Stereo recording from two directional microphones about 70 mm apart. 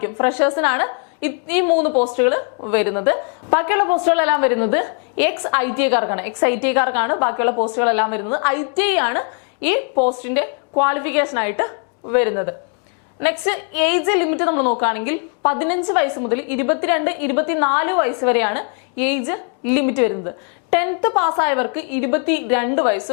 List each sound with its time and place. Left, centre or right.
0.0 s a woman's voice: centre